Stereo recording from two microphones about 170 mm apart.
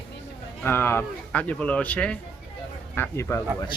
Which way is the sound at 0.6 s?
15° left (ahead or behind).